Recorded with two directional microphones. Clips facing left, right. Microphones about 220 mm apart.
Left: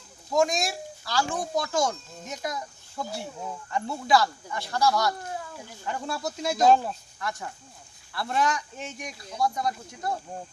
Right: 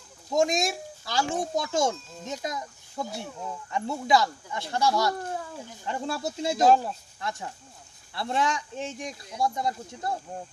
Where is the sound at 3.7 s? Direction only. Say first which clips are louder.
Even; 20° right (ahead or behind).